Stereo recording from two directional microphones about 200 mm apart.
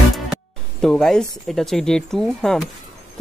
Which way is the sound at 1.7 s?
5° left (ahead or behind).